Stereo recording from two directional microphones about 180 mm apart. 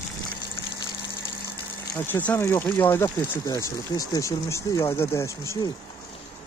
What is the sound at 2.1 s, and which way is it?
Speech, 10° left (ahead or behind).